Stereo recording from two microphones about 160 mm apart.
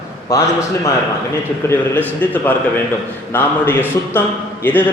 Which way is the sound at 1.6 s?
10° left (ahead or behind).